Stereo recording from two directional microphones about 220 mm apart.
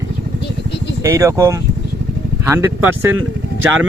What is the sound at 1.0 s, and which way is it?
Speech, 10° right (ahead or behind).